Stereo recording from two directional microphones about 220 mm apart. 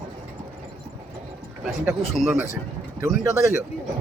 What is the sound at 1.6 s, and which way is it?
Speech, centre (ahead or behind).